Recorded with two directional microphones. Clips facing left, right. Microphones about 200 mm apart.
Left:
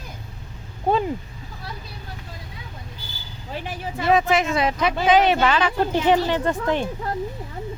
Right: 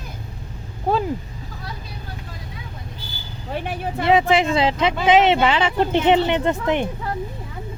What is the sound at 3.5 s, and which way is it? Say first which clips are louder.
Speech: right 4 dB; 60° right (ahead or behind).